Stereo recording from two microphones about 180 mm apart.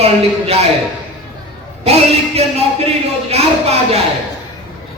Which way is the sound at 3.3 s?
35° right (ahead or behind).